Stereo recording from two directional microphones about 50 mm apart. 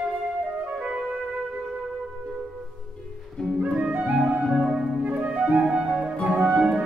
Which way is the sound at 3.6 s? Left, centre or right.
Centre.